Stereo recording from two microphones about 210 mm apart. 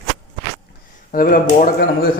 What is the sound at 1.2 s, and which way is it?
Speech, 40° left (ahead or behind).